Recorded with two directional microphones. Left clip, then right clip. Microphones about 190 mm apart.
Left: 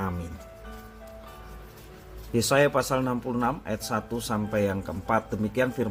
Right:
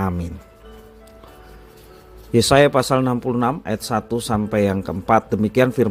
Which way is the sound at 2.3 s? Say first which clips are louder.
Right 8 dB; 40° right (ahead or behind).